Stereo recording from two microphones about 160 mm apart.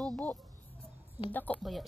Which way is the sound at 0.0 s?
10° left (ahead or behind).